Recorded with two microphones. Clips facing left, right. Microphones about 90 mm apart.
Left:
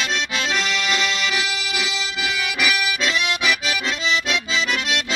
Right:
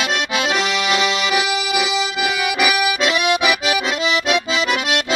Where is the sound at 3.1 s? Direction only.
60° right (ahead or behind).